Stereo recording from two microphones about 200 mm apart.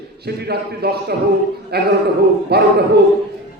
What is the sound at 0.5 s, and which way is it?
A man's voice, 55° right (ahead or behind).